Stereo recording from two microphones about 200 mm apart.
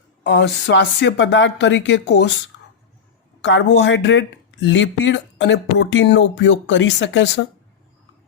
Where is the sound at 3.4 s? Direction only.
65° left (ahead or behind).